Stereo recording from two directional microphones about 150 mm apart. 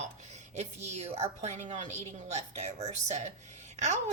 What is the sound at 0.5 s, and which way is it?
A woman's voice, 45° right (ahead or behind).